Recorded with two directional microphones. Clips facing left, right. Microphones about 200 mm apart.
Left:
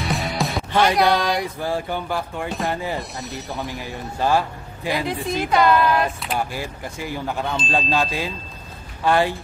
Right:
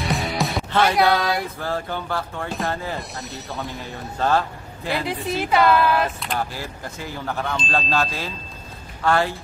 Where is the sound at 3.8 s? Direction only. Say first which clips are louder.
Even; 10° left (ahead or behind).